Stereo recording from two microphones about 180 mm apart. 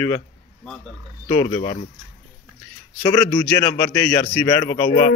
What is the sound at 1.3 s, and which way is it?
Speech, 25° left (ahead or behind).